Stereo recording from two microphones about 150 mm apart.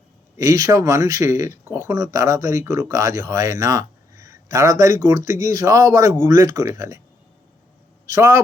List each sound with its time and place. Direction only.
0.3 s speech: 20° right (ahead or behind)
8.1 s speech: 20° right (ahead or behind)